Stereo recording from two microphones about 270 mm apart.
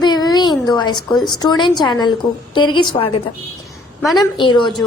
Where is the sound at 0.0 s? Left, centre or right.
Centre.